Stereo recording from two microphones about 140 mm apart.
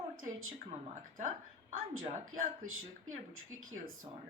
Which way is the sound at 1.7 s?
80° right.